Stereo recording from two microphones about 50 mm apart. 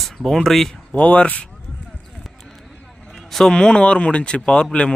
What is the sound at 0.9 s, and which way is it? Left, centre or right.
Speech, left.